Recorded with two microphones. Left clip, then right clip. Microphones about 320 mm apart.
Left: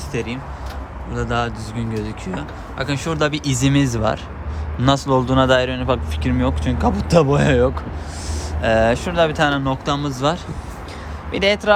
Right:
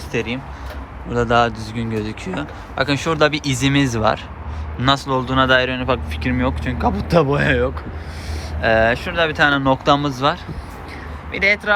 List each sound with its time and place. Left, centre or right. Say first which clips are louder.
0.1 s speech: right 3 dB; centre